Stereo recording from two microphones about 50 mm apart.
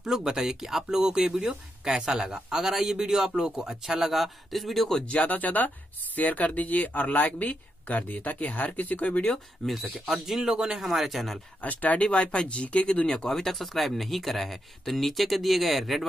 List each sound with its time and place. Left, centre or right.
0.0 s speech: centre
5.0 s speech: left
9.7 s speech: centre
11.6 s speech: left
12.1 s speech: centre